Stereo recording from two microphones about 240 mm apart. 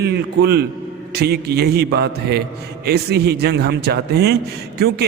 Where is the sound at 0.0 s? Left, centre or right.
Right.